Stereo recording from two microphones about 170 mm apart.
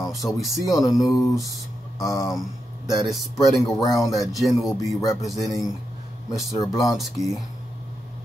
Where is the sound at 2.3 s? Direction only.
Centre (ahead or behind).